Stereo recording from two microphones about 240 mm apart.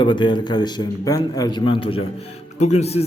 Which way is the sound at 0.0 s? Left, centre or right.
Centre.